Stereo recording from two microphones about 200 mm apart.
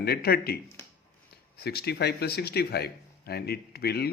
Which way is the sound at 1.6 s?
55° left (ahead or behind).